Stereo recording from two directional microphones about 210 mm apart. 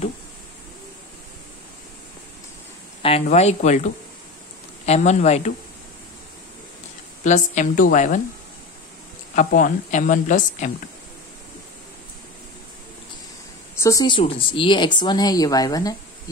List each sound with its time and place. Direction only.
3.0 s speech: 30° left (ahead or behind)
7.2 s speech: 35° left (ahead or behind)
9.3 s speech: 40° left (ahead or behind)
13.7 s speech: 15° left (ahead or behind)